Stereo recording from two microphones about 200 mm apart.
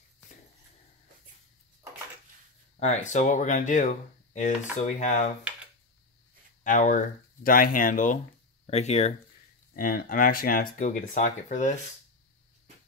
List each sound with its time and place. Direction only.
2.8 s speech: 35° left (ahead or behind)
6.6 s speech: 40° left (ahead or behind)
9.8 s speech: 45° left (ahead or behind)